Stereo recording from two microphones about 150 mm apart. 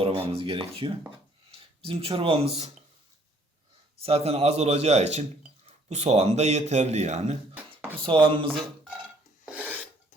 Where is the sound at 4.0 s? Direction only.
40° right (ahead or behind).